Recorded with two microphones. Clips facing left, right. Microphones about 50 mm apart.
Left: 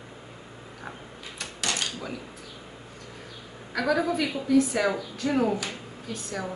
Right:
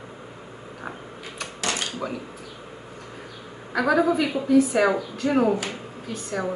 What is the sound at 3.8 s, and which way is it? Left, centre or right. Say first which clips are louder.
A woman's voice: right 5 dB; centre.